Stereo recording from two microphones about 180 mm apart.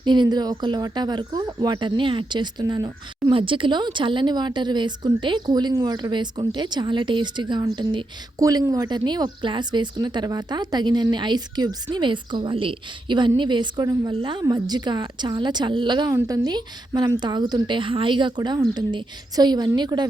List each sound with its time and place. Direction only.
0.0 s speech: 25° right (ahead or behind)